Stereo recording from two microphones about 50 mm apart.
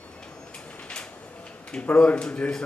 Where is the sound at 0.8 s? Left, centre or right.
Centre.